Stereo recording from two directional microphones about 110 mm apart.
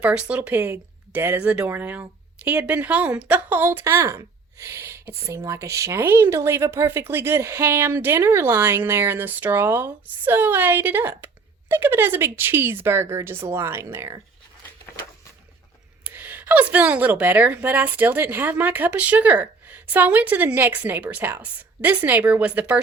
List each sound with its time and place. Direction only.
0.0 s a woman's voice: 10° right (ahead or behind); by 14.2 s 25° right (ahead or behind)
16.0 s a woman's voice: 15° right (ahead or behind)